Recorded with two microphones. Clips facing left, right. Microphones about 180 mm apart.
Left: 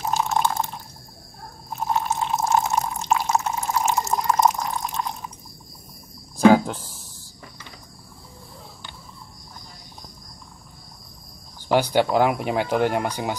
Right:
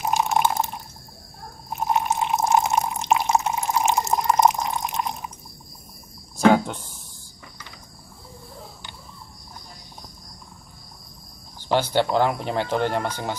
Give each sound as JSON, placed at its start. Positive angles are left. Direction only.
{"t": 0.0, "sound": "water", "side_deg": -15}
{"t": 1.7, "sound": "drip", "side_deg": -15}
{"t": 6.4, "sound": "a sound", "side_deg": 5}
{"t": 11.7, "sound": "speech", "side_deg": 10}